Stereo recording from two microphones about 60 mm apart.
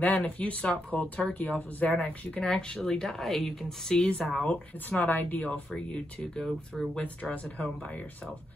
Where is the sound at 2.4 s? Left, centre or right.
Centre.